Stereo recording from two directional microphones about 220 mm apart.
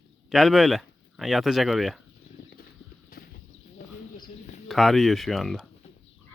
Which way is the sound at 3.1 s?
40° left (ahead or behind).